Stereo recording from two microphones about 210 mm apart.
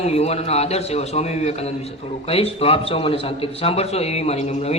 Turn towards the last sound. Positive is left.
turn(degrees=30)  # may be behind; listen again after turning